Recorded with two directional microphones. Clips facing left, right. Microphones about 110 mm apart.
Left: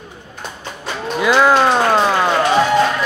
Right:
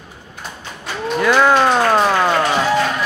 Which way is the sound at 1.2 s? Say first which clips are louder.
Left 1 dB; 5° left (ahead or behind).